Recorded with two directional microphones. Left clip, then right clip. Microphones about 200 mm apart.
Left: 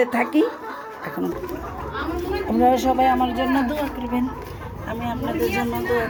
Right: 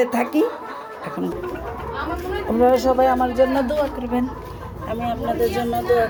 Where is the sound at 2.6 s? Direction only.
10° right (ahead or behind).